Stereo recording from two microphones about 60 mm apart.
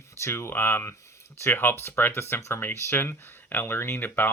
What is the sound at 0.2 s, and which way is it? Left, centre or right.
Speech, left.